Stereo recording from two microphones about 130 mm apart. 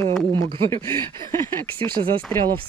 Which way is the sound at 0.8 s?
20° left (ahead or behind).